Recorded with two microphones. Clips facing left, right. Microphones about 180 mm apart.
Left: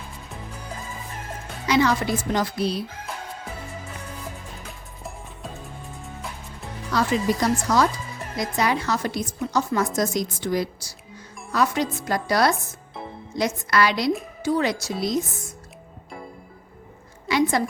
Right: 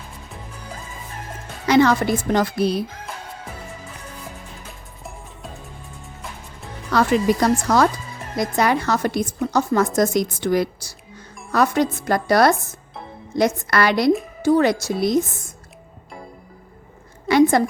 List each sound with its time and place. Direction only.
1.6 s a woman's voice: 55° right (ahead or behind)
6.9 s a woman's voice: 60° right (ahead or behind)
17.2 s a sound: 55° right (ahead or behind)